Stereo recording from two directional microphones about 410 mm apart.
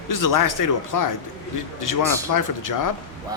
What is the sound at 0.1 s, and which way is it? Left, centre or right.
Speech, left.